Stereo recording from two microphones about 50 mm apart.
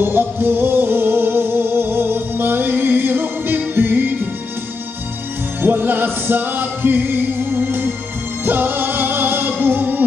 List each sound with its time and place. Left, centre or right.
0.0 s music: right
5.6 s music: right